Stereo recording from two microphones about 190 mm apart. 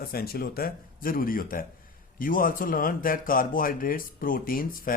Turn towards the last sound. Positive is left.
turn(degrees=50)  # may be behind; listen again after turning